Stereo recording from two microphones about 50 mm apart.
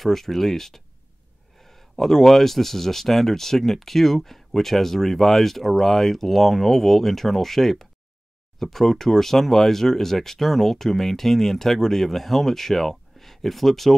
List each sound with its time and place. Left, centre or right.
0.0 s speech: centre